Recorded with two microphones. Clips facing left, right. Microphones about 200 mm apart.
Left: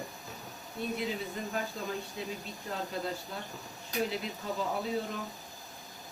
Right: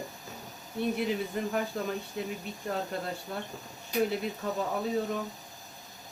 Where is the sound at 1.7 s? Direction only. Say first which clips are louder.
Right 4 dB; 60° right (ahead or behind).